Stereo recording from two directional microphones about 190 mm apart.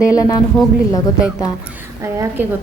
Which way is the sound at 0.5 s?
5° left (ahead or behind).